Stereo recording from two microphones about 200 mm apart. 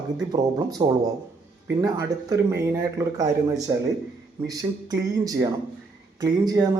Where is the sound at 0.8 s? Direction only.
25° right (ahead or behind).